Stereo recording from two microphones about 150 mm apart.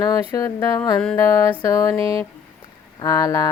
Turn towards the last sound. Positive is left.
turn(degrees=25)  # may be behind; listen again after turning